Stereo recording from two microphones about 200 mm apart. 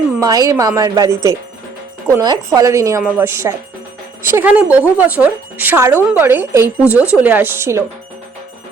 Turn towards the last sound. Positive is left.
turn(degrees=-10)  # may be behind; listen again after turning